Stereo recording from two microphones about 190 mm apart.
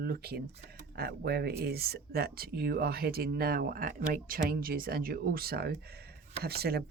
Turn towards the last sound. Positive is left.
turn(degrees=-55)  # may be behind; listen again after turning